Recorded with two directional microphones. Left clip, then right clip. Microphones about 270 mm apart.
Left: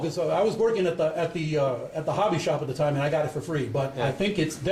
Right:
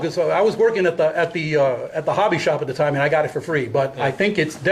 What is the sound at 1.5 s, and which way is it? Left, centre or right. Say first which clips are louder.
A man's voice: right 8 dB; right.